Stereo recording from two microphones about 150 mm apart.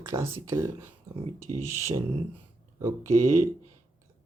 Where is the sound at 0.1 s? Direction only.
20° right (ahead or behind).